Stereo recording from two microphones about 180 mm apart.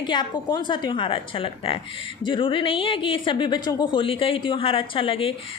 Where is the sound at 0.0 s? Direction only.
25° left (ahead or behind).